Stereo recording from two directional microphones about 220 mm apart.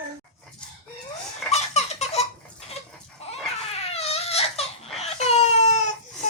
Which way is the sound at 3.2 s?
30° left (ahead or behind).